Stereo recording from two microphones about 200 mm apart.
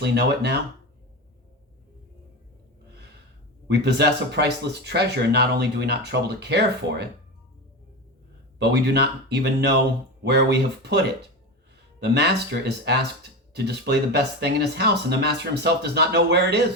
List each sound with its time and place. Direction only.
0.0 s speech: 55° right (ahead or behind)
3.7 s speech: 55° right (ahead or behind)
8.5 s speech: 55° right (ahead or behind)